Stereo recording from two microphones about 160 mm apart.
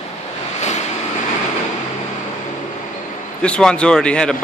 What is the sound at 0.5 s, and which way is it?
Vehicle, 45° left (ahead or behind).